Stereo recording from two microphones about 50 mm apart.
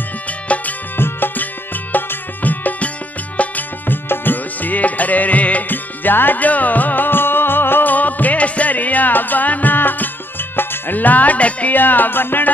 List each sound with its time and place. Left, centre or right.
0.5 s music: left
0.9 s music: left
11.7 s music: left